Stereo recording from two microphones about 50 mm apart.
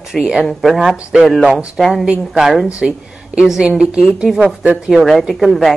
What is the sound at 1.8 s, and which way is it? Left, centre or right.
Speech, centre.